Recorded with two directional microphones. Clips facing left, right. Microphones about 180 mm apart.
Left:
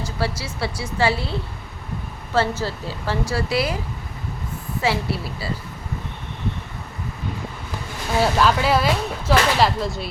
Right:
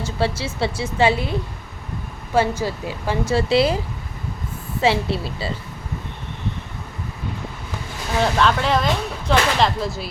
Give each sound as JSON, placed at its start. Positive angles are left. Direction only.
{"t": 0.0, "sound": "a woman's voice", "side_deg": -25}
{"t": 4.8, "sound": "a woman's voice", "side_deg": -25}
{"t": 8.2, "sound": "speech", "side_deg": 5}